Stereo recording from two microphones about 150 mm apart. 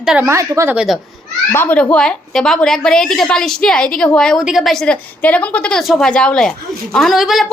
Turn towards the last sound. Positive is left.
turn(degrees=0)  # may be behind; listen again after turning